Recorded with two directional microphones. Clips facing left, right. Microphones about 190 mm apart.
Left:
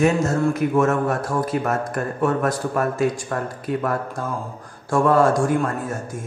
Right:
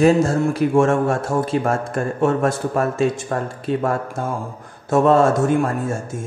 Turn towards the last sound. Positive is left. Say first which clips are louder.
# right 3 dB
turn(degrees=-25)  # may be behind; listen again after turning